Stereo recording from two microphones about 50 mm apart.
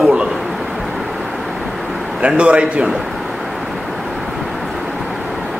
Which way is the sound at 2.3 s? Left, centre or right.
Right.